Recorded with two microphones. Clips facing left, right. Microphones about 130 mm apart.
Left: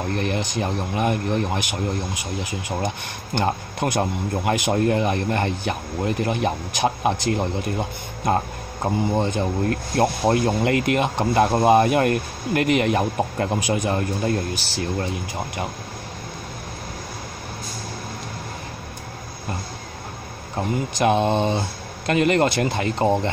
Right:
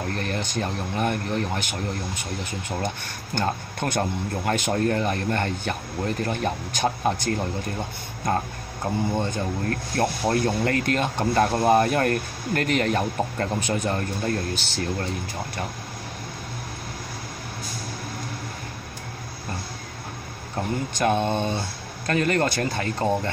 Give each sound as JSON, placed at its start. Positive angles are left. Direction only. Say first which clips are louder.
{"t": 0.1, "sound": "speech", "louder": "left 4 dB", "side_deg": 20}
{"t": 3.3, "sound": "speech", "louder": "left 3 dB", "side_deg": 15}
{"t": 9.1, "sound": "speech", "louder": "left 4 dB", "side_deg": 20}
{"t": 20.5, "sound": "speech", "louder": "left 3 dB", "side_deg": 15}